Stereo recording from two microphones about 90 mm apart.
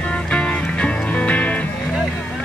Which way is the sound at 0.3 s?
15° left (ahead or behind).